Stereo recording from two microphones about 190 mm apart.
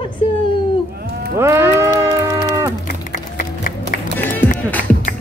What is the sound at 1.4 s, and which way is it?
Music, 15° right (ahead or behind).